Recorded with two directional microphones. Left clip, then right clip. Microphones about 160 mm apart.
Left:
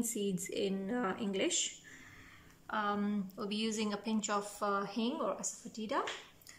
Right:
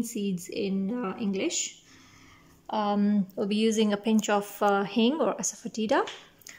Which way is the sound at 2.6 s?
35° right (ahead or behind).